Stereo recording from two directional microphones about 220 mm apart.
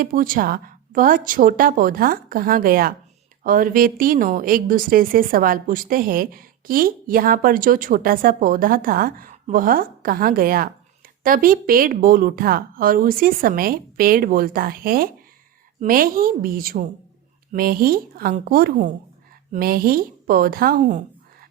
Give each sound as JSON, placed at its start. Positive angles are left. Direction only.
{"t": 0.0, "sound": "a woman's voice", "side_deg": -40}